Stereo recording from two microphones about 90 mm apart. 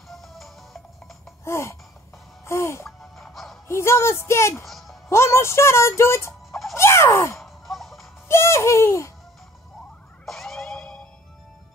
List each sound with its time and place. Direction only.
0.1 s music: centre (ahead or behind)
1.4 s music: 30° left (ahead or behind)
3.2 s music: centre (ahead or behind)
3.6 s speech: 30° left (ahead or behind)
4.6 s music: centre (ahead or behind)
5.1 s speech: 30° left (ahead or behind)
6.7 s a sound: 30° left (ahead or behind)
7.3 s sigh: centre (ahead or behind)
8.3 s speech: 30° left (ahead or behind)
10.2 s emergency vehicle: 5° left (ahead or behind)